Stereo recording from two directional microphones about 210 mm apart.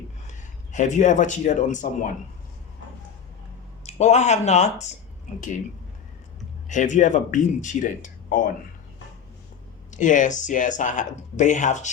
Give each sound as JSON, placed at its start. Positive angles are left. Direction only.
{"t": 0.3, "sound": "speech", "side_deg": 35}
{"t": 3.8, "sound": "speech", "side_deg": 30}
{"t": 6.7, "sound": "speech", "side_deg": 35}
{"t": 9.9, "sound": "speech", "side_deg": 35}